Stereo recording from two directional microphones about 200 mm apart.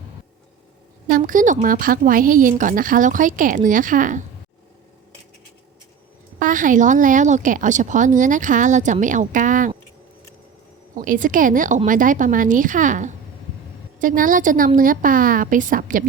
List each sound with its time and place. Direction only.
1.0 s speech: 40° right (ahead or behind)
6.4 s speech: 40° right (ahead or behind)
10.9 s a woman's voice: 40° right (ahead or behind)